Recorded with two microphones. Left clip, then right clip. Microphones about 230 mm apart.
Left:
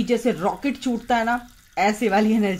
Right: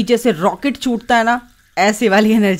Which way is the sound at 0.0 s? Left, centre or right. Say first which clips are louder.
Right 7 dB; right.